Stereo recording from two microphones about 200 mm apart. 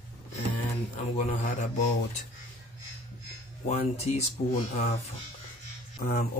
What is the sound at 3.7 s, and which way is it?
Speech, 35° left (ahead or behind).